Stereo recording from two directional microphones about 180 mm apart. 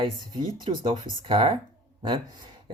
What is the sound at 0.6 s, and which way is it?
Speech, 25° right (ahead or behind).